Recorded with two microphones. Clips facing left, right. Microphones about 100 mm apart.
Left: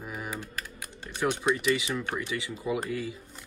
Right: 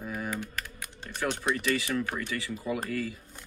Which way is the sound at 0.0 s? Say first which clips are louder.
Right 2 dB; 20° left (ahead or behind).